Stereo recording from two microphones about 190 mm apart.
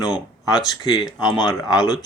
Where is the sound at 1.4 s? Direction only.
20° left (ahead or behind).